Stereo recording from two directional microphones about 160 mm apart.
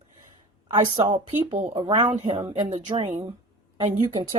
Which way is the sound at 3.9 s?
30° right (ahead or behind).